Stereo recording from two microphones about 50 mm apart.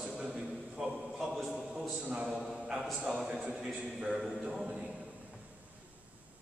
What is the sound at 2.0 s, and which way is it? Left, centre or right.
A man's voice, right.